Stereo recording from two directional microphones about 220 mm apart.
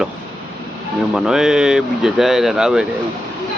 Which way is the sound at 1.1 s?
Centre (ahead or behind).